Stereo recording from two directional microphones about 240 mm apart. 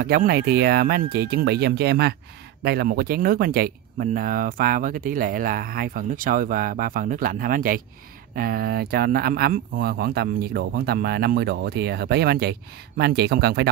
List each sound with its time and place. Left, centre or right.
0.0 s speech: right